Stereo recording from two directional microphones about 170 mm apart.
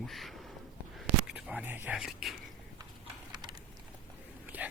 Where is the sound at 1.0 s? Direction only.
5° right (ahead or behind).